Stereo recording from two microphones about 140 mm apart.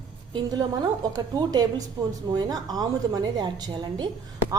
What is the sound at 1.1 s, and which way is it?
A woman's voice, 25° right (ahead or behind).